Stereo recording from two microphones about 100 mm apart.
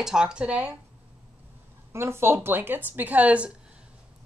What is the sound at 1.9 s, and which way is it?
Speech, 25° right (ahead or behind).